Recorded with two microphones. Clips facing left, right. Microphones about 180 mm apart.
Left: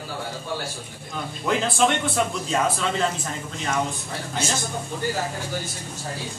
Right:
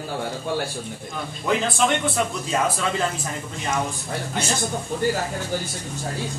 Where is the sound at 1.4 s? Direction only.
Centre (ahead or behind).